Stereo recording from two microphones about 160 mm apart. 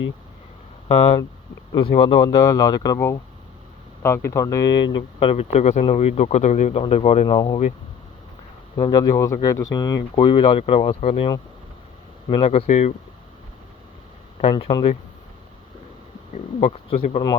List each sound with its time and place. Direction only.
1.7 s speech: 35° left (ahead or behind)
4.3 s speech: 20° left (ahead or behind); by 7.3 s 40° left (ahead or behind)
7.3 s speech: 25° left (ahead or behind)
8.7 s speech: 25° left (ahead or behind)
12.3 s speech: 35° left (ahead or behind)
14.5 s speech: 25° left (ahead or behind)
16.3 s speech: 40° left (ahead or behind)